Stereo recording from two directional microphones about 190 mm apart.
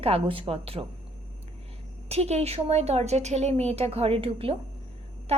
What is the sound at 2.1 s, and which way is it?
Speech, 35° right (ahead or behind).